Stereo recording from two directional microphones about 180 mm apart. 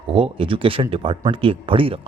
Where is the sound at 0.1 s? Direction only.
30° right (ahead or behind).